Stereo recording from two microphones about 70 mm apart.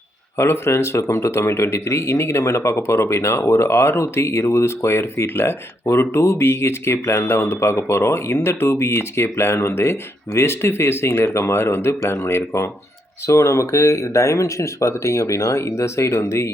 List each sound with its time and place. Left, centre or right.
0.3 s speech: left